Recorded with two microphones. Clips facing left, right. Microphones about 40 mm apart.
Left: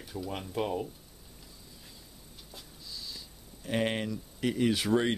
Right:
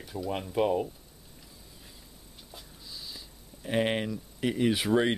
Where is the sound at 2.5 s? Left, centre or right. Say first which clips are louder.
Even; centre.